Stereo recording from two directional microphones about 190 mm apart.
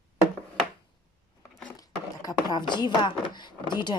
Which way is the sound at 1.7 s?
20° left (ahead or behind).